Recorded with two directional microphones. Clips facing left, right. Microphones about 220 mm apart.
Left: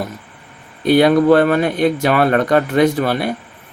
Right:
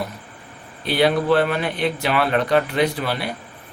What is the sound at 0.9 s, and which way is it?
Speech, 45° left (ahead or behind).